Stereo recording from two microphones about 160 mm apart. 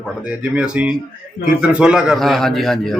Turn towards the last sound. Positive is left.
turn(degrees=0)  # may be behind; listen again after turning